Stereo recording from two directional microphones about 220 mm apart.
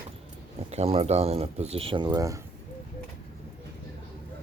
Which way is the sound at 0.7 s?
30° right (ahead or behind).